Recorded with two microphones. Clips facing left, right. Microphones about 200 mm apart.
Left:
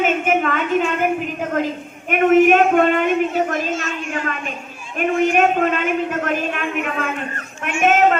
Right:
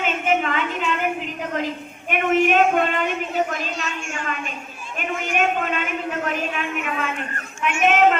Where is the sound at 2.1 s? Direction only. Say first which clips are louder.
Left 6 dB; 45° left (ahead or behind).